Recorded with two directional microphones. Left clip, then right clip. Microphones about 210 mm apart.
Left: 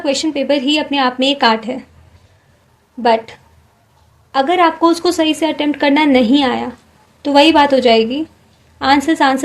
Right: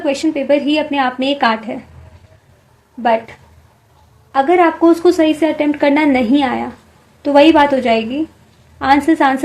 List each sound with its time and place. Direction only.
0.0 s a woman's voice: 45° left (ahead or behind)
3.0 s a woman's voice: 45° left (ahead or behind)